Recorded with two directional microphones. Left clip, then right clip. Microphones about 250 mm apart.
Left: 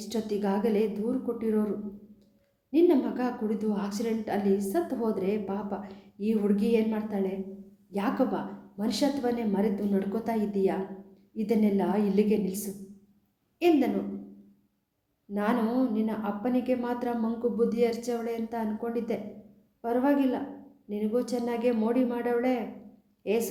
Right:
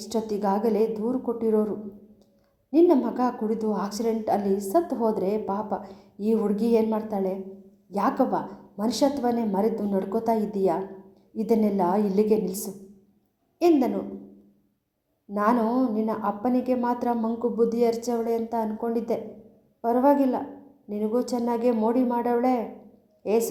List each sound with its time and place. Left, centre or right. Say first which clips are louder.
0.0 s a woman's voice: right 4 dB; centre
2.7 s a woman's voice: right 4 dB; centre
15.3 s a woman's voice: right 6 dB; centre